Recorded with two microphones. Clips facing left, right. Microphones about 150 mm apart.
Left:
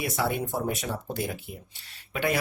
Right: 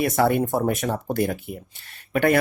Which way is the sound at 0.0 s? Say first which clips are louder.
Right 8 dB; 60° right (ahead or behind).